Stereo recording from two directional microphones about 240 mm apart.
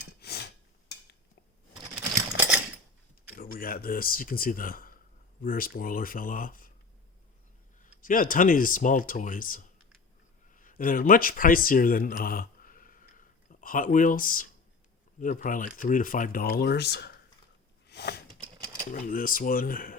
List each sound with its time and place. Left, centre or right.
0.2 s a sound: left
2.1 s typewriter: centre
3.3 s speech: left
7.9 s speech: left
17.8 s a sound: left
18.9 s speech: left